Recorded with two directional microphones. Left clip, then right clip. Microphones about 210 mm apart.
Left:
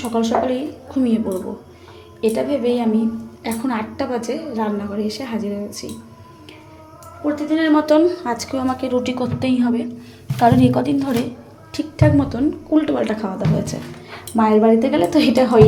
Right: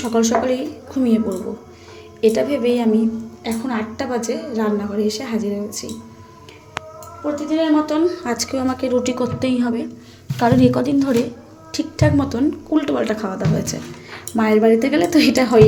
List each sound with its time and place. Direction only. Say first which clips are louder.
0.0 s a woman's voice: right 1 dB; 10° right (ahead or behind)
2.2 s a woman's voice: right 2 dB; 10° right (ahead or behind)
7.8 s a woman's voice: left 5 dB; 25° left (ahead or behind)
8.0 s a woman's voice: left 1 dB; 5° right (ahead or behind)